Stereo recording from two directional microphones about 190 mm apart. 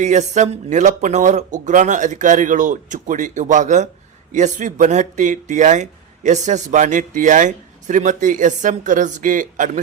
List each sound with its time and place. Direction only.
0.0 s speech: 40° right (ahead or behind)